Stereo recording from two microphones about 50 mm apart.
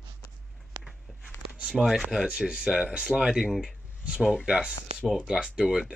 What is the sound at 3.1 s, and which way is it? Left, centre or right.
Speech, centre.